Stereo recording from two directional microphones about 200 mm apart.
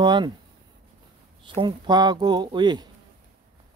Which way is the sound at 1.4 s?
25° right (ahead or behind).